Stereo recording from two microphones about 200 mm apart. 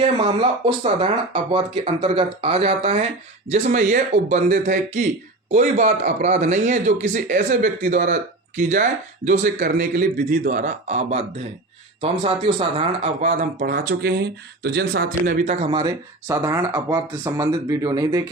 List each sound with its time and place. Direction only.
0.0 s speech: 25° right (ahead or behind)
13.2 s speech: 45° right (ahead or behind); by 18.2 s 15° right (ahead or behind)